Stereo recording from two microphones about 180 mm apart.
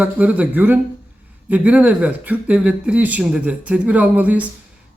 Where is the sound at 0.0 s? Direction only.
5° right (ahead or behind).